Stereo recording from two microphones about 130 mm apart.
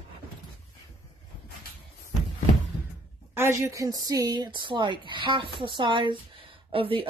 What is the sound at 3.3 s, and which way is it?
A woman's voice, 20° right (ahead or behind).